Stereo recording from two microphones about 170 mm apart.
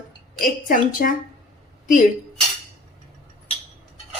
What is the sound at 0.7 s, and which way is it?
Speech, 55° left (ahead or behind).